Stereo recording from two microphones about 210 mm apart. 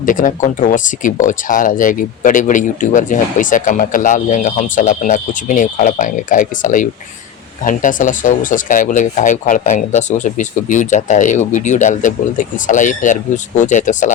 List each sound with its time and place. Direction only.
0.0 s speech: 40° left (ahead or behind)